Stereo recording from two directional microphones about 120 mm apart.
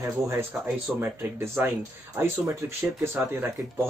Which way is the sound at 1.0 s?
20° right (ahead or behind).